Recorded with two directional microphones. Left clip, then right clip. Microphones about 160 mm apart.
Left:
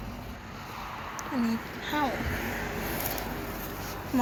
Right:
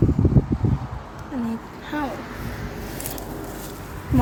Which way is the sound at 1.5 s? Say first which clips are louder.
Right 1 dB; 30° right (ahead or behind).